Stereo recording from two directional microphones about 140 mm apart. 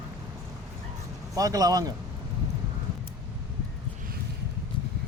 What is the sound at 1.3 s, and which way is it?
Speech, 25° right (ahead or behind).